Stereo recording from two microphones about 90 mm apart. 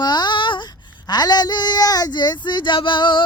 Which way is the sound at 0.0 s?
55° left (ahead or behind).